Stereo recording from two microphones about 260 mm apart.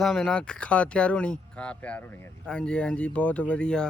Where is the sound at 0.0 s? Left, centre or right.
Centre.